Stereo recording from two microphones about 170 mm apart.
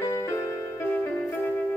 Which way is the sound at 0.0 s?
15° left (ahead or behind).